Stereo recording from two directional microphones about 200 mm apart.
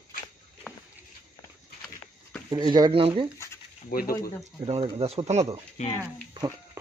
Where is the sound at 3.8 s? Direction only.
50° left (ahead or behind).